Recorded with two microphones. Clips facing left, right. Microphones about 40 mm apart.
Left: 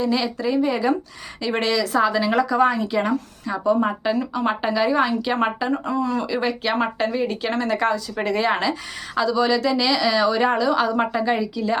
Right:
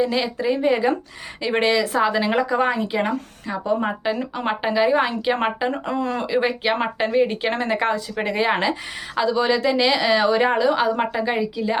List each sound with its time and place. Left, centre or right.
0.0 s a woman's voice: centre
5.8 s speech: right
6.3 s a woman's voice: centre